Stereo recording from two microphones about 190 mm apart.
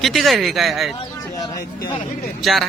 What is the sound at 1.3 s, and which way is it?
Speech, 20° left (ahead or behind).